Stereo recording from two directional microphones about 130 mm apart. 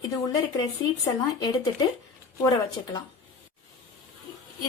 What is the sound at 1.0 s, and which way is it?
Speech, 30° left (ahead or behind).